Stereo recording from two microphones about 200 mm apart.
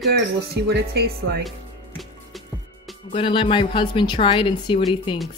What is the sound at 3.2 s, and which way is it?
Speech, 25° left (ahead or behind).